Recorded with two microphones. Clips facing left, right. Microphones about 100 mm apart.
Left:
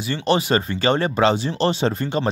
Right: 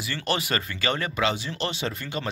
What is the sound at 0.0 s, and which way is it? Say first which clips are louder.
Speech: left 8 dB; 25° left (ahead or behind).